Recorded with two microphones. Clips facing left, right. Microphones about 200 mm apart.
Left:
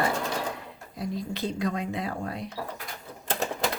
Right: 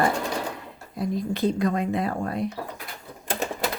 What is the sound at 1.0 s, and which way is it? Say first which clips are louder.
Speech: right 6 dB; 50° right (ahead or behind).